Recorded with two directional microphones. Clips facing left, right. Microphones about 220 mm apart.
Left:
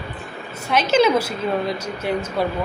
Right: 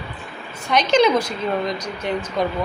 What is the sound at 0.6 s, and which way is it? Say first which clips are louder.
A woman's voice: even; 5° left (ahead or behind).